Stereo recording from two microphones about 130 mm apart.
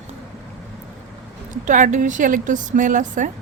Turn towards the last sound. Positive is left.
turn(degrees=-80)